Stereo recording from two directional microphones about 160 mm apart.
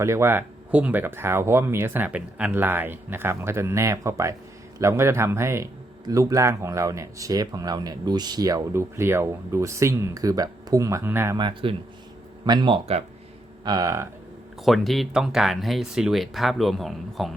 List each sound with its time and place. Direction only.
0.0 s speech: 15° right (ahead or behind)
11.3 s speech: 30° right (ahead or behind)
13.7 s speech: 20° right (ahead or behind)
14.6 s speech: centre (ahead or behind)